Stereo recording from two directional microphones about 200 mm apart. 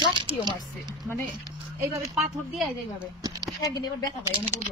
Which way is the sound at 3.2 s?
20° right (ahead or behind).